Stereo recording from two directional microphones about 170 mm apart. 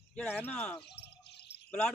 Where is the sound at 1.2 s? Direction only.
75° left (ahead or behind).